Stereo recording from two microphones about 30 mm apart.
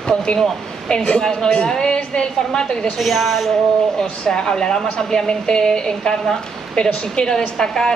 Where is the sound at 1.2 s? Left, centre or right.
Centre.